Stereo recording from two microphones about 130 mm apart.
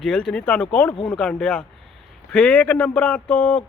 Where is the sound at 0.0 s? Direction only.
5° left (ahead or behind).